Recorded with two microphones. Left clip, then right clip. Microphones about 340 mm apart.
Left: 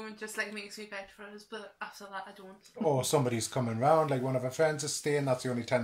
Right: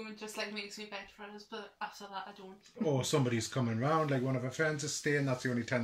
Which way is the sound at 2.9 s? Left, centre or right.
Centre.